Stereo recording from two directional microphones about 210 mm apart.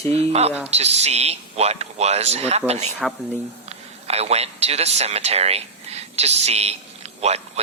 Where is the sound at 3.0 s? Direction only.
5° left (ahead or behind).